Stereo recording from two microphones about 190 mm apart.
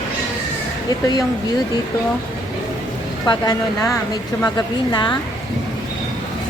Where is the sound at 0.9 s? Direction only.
20° left (ahead or behind).